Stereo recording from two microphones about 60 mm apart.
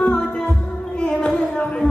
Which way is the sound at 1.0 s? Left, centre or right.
Centre.